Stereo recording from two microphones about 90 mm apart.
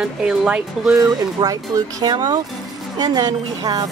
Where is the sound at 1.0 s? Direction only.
40° right (ahead or behind).